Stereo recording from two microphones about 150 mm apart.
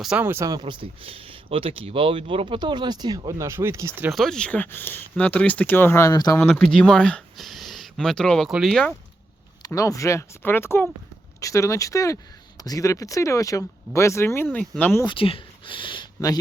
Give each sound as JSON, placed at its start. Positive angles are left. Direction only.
{"t": 0.0, "sound": "speech", "side_deg": -10}
{"t": 4.1, "sound": "speech", "side_deg": 0}
{"t": 6.4, "sound": "speech", "side_deg": 5}
{"t": 9.6, "sound": "speech", "side_deg": 20}
{"t": 15.0, "sound": "speech", "side_deg": 35}